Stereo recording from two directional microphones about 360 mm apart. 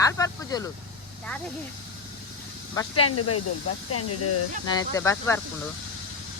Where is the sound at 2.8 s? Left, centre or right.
Centre.